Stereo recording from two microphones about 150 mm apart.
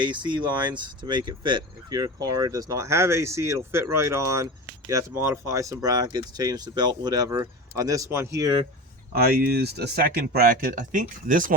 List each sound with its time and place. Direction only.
0.0 s speech: 30° right (ahead or behind)
9.1 s speech: 90° right; by 11.5 s 65° right (ahead or behind)